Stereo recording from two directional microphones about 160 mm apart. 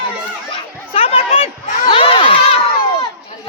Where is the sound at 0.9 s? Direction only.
35° left (ahead or behind).